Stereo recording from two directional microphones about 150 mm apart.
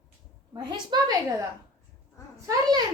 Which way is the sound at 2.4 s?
25° right (ahead or behind).